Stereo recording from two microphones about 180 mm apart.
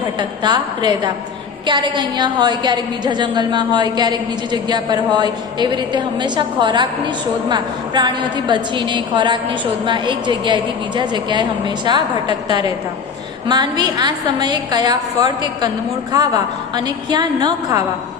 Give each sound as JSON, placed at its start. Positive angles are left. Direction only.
{"t": 0.2, "sound": "a woman's voice", "side_deg": -25}